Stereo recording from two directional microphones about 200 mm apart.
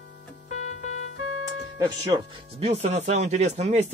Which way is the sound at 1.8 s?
25° right (ahead or behind).